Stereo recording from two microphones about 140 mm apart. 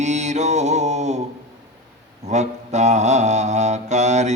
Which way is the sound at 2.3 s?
55° right (ahead or behind).